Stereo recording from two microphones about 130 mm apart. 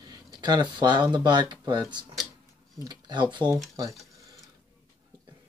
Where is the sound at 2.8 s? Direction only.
35° right (ahead or behind).